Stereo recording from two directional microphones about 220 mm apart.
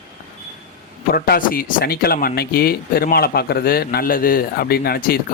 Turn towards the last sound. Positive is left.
turn(degrees=45)  # may be behind; listen again after turning